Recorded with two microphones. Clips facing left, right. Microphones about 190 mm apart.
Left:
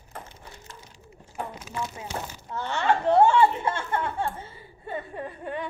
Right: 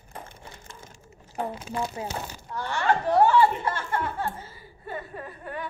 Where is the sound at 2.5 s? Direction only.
25° left (ahead or behind).